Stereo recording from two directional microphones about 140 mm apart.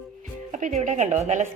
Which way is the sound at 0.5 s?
55° right (ahead or behind).